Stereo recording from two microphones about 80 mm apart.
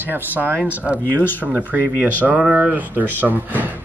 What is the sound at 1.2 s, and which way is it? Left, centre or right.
Speech, left.